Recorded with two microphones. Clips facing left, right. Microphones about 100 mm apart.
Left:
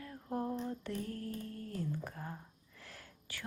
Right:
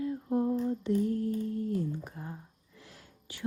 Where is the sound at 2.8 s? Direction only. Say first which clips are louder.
Right 1 dB; 20° right (ahead or behind).